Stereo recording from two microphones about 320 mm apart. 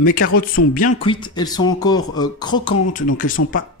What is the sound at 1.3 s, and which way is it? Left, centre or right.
Speech, centre.